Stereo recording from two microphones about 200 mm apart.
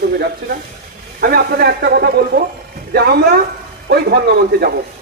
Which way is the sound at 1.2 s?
50° right (ahead or behind).